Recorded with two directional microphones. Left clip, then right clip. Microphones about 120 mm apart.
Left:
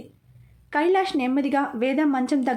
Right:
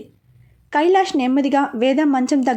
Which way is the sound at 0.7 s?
40° right (ahead or behind).